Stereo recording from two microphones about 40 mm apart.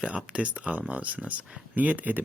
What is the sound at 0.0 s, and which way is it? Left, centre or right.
Speech, right.